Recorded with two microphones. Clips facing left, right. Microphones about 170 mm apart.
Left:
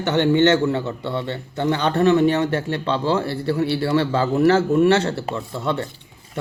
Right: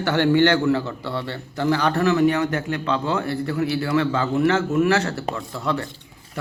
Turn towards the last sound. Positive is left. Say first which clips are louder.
# left 2 dB
turn(degrees=25)  # may be behind; listen again after turning